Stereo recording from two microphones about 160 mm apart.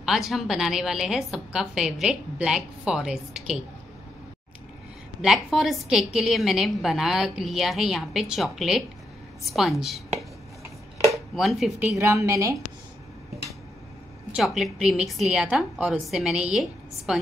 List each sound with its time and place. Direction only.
0.0 s a woman's voice: centre (ahead or behind)
5.2 s a woman's voice: centre (ahead or behind)
11.3 s a woman's voice: centre (ahead or behind)
12.0 s a woman's voice: 15° right (ahead or behind)
14.3 s a woman's voice: centre (ahead or behind)